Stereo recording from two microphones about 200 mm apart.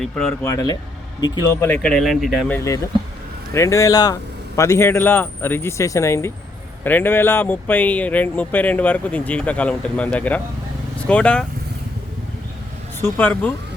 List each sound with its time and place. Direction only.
0.0 s speech: centre (ahead or behind)
0.4 s speech: 15° left (ahead or behind)
1.6 s speech: 5° left (ahead or behind)
2.6 s speech: 15° left (ahead or behind)
13.0 s speech: 10° left (ahead or behind)